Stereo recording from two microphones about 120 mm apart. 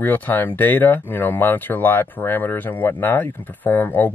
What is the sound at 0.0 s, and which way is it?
Speech, 15° left (ahead or behind).